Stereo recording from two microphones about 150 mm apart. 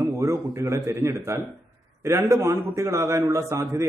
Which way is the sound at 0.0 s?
20° right (ahead or behind).